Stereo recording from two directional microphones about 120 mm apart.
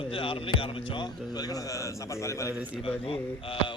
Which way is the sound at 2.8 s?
50° left (ahead or behind).